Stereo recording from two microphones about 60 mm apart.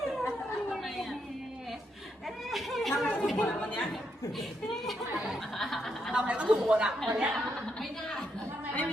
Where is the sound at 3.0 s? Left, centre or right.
Left.